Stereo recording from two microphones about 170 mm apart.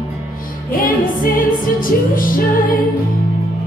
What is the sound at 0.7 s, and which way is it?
Music, 55° left (ahead or behind).